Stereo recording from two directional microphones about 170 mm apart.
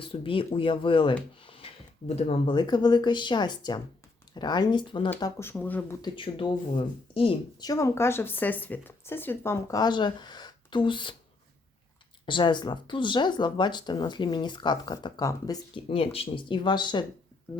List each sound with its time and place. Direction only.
0.0 s speech: 30° left (ahead or behind)
1.5 s a sound: 35° left (ahead or behind)
2.5 s speech: 25° left (ahead or behind)
5.2 s speech: 15° left (ahead or behind)
6.0 s speech: 30° left (ahead or behind)
12.2 s speech: 30° left (ahead or behind)
15.9 s speech: 35° left (ahead or behind)